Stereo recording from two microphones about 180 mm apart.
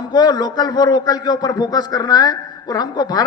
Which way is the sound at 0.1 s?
20° left (ahead or behind).